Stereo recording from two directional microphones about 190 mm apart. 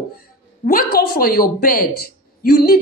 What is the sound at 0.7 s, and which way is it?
Speech, 50° left (ahead or behind).